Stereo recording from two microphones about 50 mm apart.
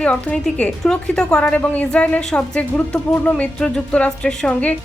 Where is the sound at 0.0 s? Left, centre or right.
Left.